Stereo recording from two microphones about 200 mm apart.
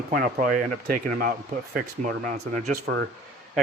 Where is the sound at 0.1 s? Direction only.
45° right (ahead or behind).